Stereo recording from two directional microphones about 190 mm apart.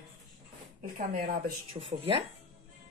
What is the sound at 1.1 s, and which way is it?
Speech, 50° right (ahead or behind).